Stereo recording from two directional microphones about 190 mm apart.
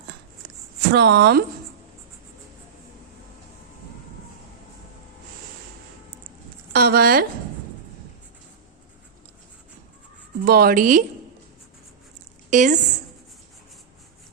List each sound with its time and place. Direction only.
0.9 s speech: 60° right (ahead or behind)
6.7 s speech: 55° right (ahead or behind)
10.4 s speech: 55° right (ahead or behind)
12.5 s a woman's voice: 40° right (ahead or behind)